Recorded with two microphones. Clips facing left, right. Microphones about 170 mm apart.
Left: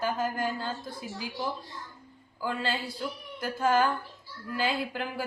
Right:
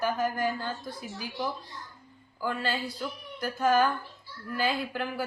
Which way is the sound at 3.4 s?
25° left (ahead or behind).